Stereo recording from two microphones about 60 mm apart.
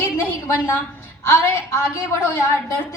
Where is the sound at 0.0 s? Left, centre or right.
Left.